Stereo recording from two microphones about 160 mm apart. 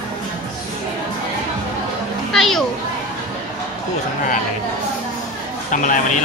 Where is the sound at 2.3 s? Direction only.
Centre (ahead or behind).